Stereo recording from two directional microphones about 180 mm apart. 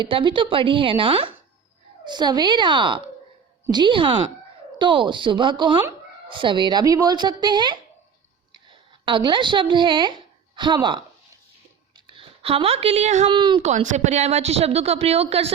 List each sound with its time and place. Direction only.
0.0 s speech: 25° right (ahead or behind)
9.0 s a woman's voice: 25° right (ahead or behind)
12.0 s speech: 30° right (ahead or behind)
13.2 s speech: 25° right (ahead or behind)
13.7 s a woman's voice: 40° right (ahead or behind)